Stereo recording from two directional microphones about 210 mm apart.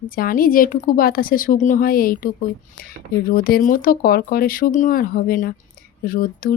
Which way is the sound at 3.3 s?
45° left (ahead or behind).